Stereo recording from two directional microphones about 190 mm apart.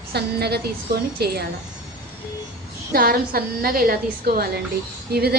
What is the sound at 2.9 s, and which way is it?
A woman's voice, 50° right (ahead or behind).